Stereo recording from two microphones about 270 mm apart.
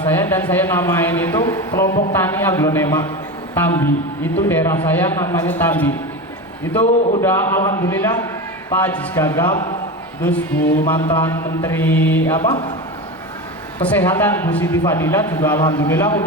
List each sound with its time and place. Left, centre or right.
0.0 s a man's voice: centre
6.8 s a man's voice: left
7.2 s a man's voice: centre
10.8 s a man's voice: centre
12.4 s a man's voice: centre
13.8 s a man's voice: centre